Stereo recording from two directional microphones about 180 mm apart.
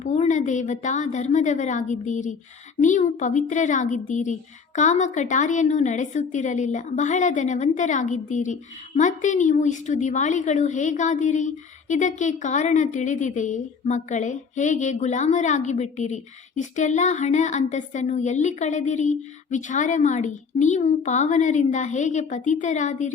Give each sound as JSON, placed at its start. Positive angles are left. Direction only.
{"t": 0.0, "sound": "a woman's voice", "side_deg": 40}